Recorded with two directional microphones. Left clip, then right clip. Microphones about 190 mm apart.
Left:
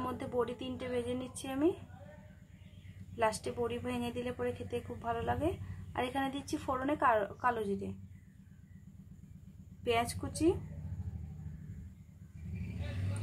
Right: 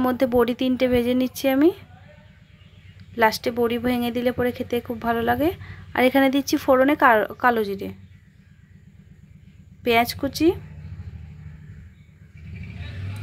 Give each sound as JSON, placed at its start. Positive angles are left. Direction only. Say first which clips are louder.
{"t": 0.0, "sound": "speech", "louder": "right 16 dB", "side_deg": -30}
{"t": 3.2, "sound": "speech", "louder": "right 14 dB", "side_deg": -25}
{"t": 9.8, "sound": "speech", "louder": "right 13 dB", "side_deg": -25}